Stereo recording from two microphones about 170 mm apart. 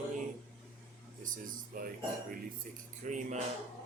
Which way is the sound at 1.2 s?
50° right (ahead or behind).